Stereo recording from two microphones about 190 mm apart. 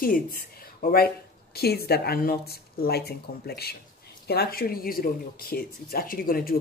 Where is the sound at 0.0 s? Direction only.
50° left (ahead or behind).